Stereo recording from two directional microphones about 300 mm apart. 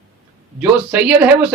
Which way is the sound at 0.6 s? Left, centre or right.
Centre.